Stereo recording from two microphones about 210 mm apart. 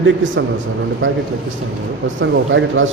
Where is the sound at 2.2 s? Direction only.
60° right (ahead or behind).